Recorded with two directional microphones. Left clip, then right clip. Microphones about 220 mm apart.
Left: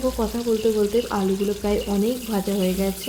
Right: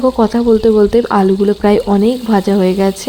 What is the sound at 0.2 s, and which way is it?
Speech, 40° right (ahead or behind).